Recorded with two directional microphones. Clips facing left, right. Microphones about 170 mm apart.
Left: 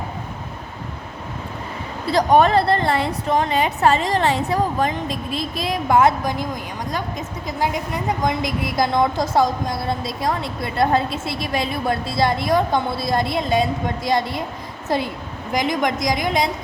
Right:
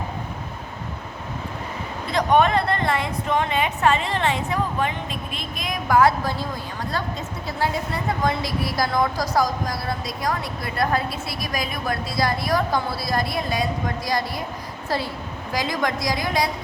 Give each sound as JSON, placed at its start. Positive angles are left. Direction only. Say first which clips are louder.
{"t": 2.0, "sound": "a woman's voice", "louder": "left 3 dB", "side_deg": 35}